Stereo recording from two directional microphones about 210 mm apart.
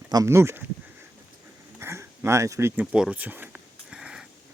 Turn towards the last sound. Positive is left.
turn(degrees=-5)  # may be behind; listen again after turning